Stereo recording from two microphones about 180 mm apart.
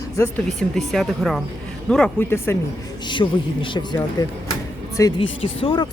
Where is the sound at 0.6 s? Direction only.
Centre (ahead or behind).